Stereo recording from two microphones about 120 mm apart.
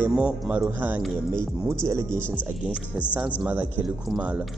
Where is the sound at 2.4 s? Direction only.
10° right (ahead or behind).